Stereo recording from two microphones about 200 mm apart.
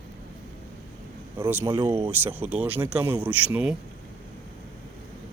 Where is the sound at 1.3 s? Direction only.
10° right (ahead or behind).